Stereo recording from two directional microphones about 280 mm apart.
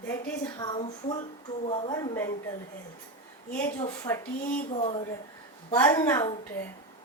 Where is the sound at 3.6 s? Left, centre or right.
Centre.